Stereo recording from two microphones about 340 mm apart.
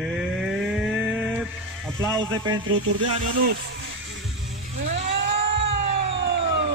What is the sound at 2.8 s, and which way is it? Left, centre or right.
Speech, right.